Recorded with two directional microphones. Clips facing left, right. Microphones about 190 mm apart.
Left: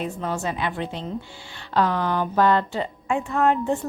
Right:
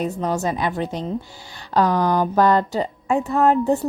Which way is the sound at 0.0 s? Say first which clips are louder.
Right 5 dB; 40° right (ahead or behind).